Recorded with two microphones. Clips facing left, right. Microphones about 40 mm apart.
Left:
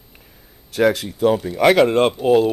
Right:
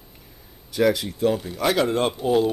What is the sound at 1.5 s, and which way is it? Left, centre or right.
Speech, left.